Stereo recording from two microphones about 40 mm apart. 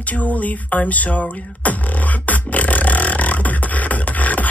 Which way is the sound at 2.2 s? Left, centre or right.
Left.